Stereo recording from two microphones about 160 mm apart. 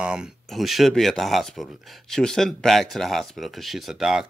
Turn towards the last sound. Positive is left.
turn(degrees=-5)  # may be behind; listen again after turning